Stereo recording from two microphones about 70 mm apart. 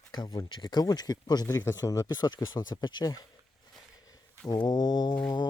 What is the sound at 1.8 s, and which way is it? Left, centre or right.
Speech, left.